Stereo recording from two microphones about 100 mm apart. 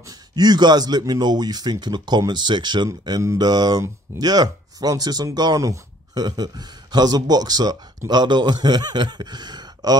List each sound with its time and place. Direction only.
0.4 s speech: 45° right (ahead or behind)
3.1 s a man's voice: 40° right (ahead or behind)